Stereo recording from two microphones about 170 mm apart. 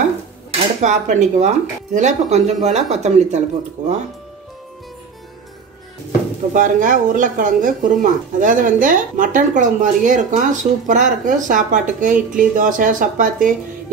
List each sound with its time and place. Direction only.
0.8 s speech: 45° right (ahead or behind)
6.5 s speech: 50° right (ahead or behind)